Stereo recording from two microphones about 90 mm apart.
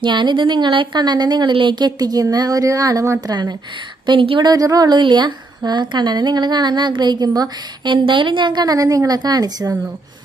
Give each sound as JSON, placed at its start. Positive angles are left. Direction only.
{"t": 0.0, "sound": "a woman's voice", "side_deg": -60}
{"t": 3.2, "sound": "a woman's voice", "side_deg": -50}
{"t": 4.0, "sound": "speech", "side_deg": -70}
{"t": 4.4, "sound": "a woman's voice", "side_deg": -45}
{"t": 8.0, "sound": "a woman's voice", "side_deg": -65}